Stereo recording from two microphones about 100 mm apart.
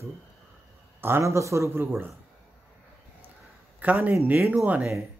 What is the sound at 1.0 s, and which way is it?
A man's voice, 25° right (ahead or behind).